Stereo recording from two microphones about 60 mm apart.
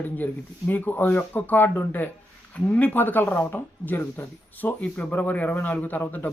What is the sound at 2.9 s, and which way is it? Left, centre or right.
Speech, left.